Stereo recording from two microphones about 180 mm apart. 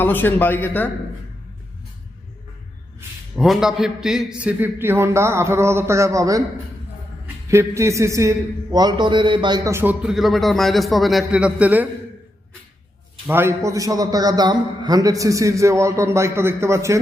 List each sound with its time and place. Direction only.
0.0 s speech: 10° left (ahead or behind)
3.3 s a man's voice: centre (ahead or behind); by 6.4 s 20° right (ahead or behind)
7.5 s a man's voice: 15° right (ahead or behind)
13.2 s a man's voice: 15° right (ahead or behind)